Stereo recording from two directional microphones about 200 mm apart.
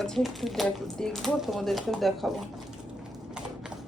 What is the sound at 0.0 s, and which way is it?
Speech, centre (ahead or behind).